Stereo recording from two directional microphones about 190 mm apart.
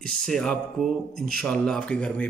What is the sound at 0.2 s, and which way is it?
A man's voice, 5° left (ahead or behind).